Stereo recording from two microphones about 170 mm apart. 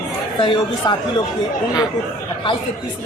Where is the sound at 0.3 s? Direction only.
30° left (ahead or behind).